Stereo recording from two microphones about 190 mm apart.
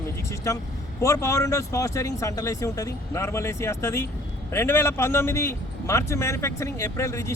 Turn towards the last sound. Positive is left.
turn(degrees=15)  # may be behind; listen again after turning